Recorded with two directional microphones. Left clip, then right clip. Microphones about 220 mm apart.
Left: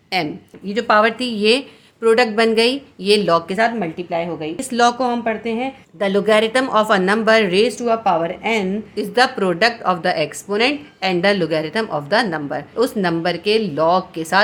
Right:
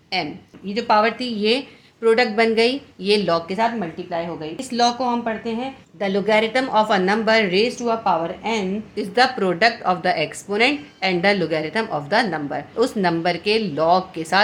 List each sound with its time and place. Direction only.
0.1 s a woman's voice: 35° left (ahead or behind); by 14.4 s 15° left (ahead or behind)